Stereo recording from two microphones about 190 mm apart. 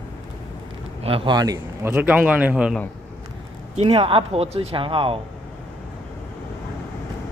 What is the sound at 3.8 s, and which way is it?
Speech, 30° right (ahead or behind).